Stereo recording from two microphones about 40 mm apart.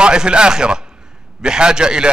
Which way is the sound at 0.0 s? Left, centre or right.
Right.